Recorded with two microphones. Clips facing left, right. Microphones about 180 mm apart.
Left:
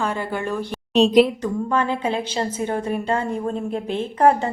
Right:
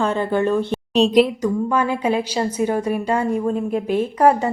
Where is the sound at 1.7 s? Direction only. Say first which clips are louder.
Even; 10° right (ahead or behind).